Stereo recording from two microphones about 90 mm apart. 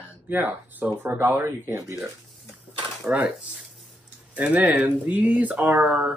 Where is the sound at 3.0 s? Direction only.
15° right (ahead or behind).